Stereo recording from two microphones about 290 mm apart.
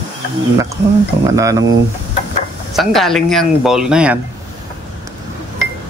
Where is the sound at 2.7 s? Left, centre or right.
Centre.